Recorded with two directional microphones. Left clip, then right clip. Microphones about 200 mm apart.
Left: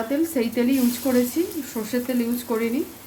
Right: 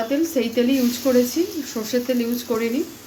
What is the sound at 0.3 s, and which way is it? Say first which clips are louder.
Speech: right 4 dB; 20° left (ahead or behind).